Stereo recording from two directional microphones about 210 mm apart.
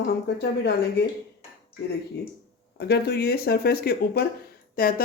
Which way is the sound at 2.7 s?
50° left (ahead or behind).